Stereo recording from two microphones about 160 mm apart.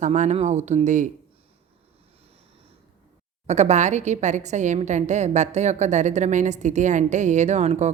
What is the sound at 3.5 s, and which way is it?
A woman's voice, 45° right (ahead or behind).